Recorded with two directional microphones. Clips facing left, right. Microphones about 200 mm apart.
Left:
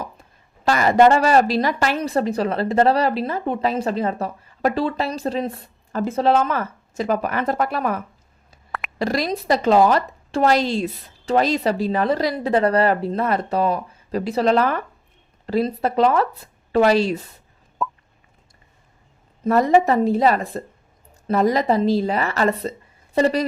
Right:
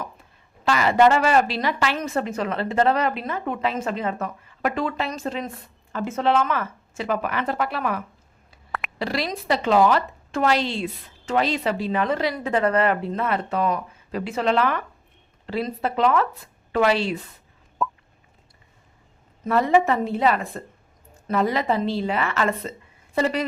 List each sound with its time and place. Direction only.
0.6 s a woman's voice: 40° left (ahead or behind)
17.8 s a sound: centre (ahead or behind)
19.5 s a woman's voice: 40° left (ahead or behind)